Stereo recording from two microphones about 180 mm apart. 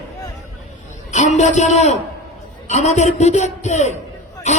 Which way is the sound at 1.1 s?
40° left (ahead or behind).